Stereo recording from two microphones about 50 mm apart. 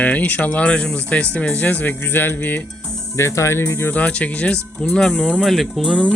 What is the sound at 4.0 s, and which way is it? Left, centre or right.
Speech, left.